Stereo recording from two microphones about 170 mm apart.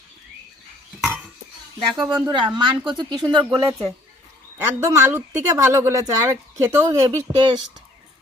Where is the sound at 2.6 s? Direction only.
30° right (ahead or behind).